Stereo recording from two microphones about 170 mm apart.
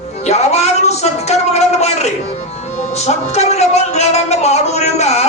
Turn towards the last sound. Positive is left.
turn(degrees=40)  # may be behind; listen again after turning